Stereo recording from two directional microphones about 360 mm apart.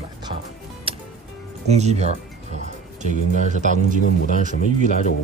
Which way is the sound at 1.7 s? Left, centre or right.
Centre.